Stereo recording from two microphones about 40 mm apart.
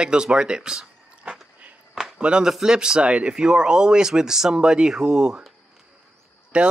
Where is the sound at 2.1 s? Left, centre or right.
Right.